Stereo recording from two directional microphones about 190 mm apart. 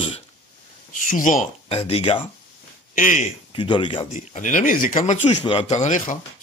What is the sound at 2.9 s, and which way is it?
Speech, 45° left (ahead or behind).